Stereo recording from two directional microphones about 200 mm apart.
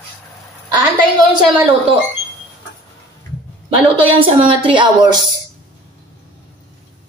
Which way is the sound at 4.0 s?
25° right (ahead or behind).